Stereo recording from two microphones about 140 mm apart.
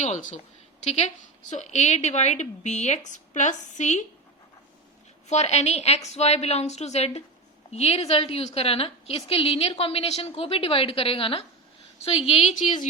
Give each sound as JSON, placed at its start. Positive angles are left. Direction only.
{"t": 0.0, "sound": "a woman's voice", "side_deg": 60}
{"t": 5.3, "sound": "a woman's voice", "side_deg": 55}